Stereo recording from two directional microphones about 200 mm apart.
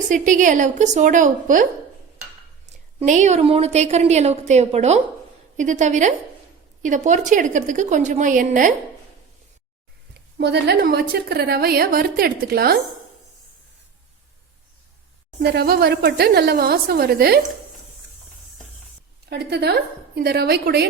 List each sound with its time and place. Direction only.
0.1 s a woman's voice: 40° right (ahead or behind)
3.0 s a woman's voice: 35° right (ahead or behind)
10.2 s a woman's voice: 55° right (ahead or behind)
15.4 s a woman's voice: 50° right (ahead or behind)
19.3 s a woman's voice: 55° right (ahead or behind)